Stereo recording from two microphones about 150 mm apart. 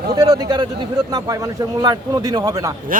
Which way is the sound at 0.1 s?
25° right (ahead or behind).